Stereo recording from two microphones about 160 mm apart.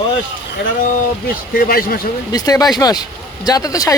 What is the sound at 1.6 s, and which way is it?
Speech, 65° left (ahead or behind).